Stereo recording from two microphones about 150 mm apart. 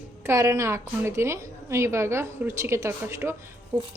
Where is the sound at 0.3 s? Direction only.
20° right (ahead or behind).